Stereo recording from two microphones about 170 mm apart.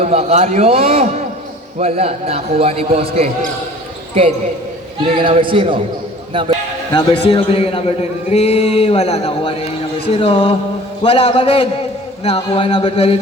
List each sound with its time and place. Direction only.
0.0 s a man's voice: 40° right (ahead or behind)
5.1 s a man's voice: 30° right (ahead or behind)
6.9 s a man's voice: 30° left (ahead or behind)